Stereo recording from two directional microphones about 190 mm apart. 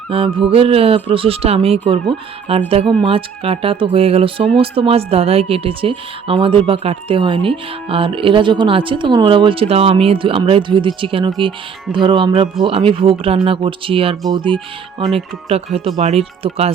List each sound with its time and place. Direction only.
0.1 s speech: 30° right (ahead or behind)